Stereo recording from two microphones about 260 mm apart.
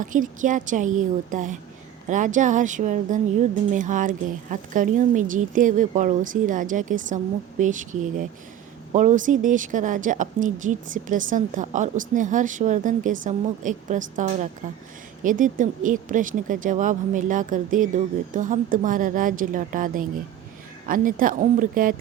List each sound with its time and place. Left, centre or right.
0.0 s speech: right